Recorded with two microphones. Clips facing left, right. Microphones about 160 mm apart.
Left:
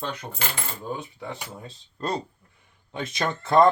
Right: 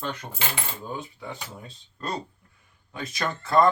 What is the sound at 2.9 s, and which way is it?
Speech, 25° left (ahead or behind).